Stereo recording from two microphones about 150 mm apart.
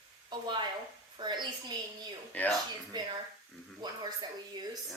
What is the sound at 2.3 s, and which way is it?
Speech, 10° left (ahead or behind).